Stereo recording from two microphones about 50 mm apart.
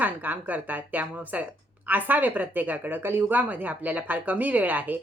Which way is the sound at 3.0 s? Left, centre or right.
Right.